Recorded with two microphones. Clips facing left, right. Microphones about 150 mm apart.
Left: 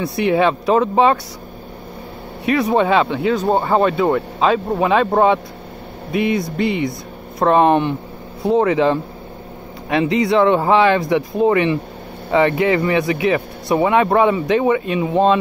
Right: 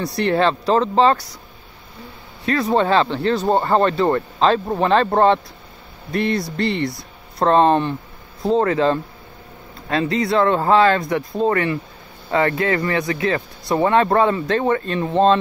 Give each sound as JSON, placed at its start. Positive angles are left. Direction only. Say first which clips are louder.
{"t": 0.0, "sound": "speech", "louder": "left 2 dB", "side_deg": 10}
{"t": 2.4, "sound": "speech", "louder": "left 2 dB", "side_deg": 15}